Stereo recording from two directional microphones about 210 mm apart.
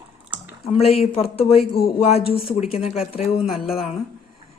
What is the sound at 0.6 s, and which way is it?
Speech, 30° left (ahead or behind).